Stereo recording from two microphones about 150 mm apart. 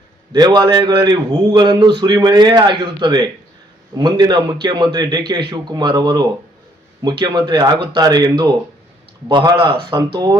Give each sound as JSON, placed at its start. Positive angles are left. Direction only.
{"t": 0.3, "sound": "a man's voice", "side_deg": -30}